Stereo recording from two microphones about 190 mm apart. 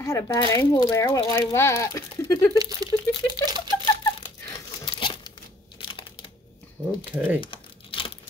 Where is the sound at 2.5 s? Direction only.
20° right (ahead or behind).